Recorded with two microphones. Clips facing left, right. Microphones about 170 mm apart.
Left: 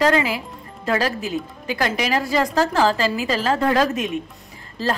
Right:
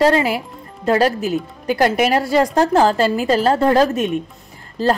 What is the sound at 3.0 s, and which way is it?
Speech, 50° right (ahead or behind).